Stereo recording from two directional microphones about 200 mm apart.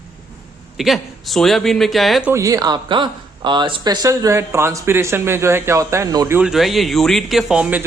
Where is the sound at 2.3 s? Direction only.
15° right (ahead or behind).